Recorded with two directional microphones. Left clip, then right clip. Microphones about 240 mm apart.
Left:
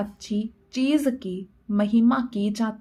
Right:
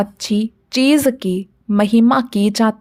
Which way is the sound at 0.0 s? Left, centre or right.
Right.